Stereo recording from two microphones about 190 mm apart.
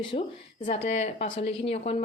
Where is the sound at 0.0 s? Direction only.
30° left (ahead or behind).